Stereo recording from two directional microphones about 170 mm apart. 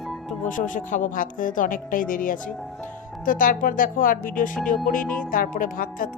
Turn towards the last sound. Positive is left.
turn(degrees=55)  # may be behind; listen again after turning